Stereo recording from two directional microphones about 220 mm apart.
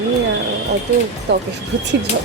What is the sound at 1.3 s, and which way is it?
Speech, 50° right (ahead or behind).